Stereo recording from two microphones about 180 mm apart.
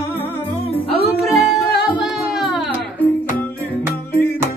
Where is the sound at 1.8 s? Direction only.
5° right (ahead or behind).